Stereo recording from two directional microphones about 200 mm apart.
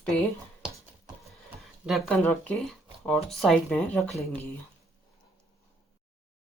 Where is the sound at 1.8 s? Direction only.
Centre (ahead or behind).